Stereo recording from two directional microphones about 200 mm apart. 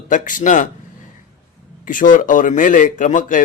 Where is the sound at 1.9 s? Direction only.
40° left (ahead or behind).